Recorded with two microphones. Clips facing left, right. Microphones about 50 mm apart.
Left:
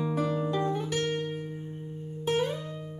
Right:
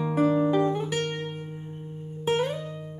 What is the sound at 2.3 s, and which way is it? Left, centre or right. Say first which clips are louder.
Music: right 2 dB; right.